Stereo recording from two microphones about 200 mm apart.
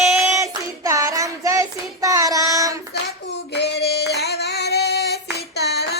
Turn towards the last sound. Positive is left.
turn(degrees=55)  # may be behind; listen again after turning